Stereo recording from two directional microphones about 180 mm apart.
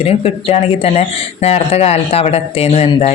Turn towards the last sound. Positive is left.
turn(degrees=35)  # may be behind; listen again after turning